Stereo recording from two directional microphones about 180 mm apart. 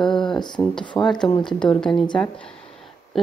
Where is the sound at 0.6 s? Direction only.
5° left (ahead or behind).